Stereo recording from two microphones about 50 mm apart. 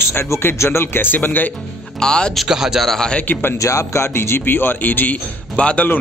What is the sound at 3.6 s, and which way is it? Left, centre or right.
Speech, left.